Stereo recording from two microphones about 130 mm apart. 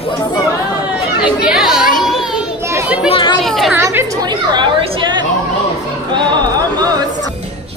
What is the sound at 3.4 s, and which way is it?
Speech, centre (ahead or behind).